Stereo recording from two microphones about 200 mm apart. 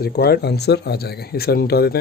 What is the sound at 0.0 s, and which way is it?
Speech, 55° left (ahead or behind).